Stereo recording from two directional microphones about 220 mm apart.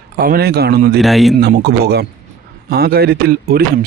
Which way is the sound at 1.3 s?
50° right (ahead or behind).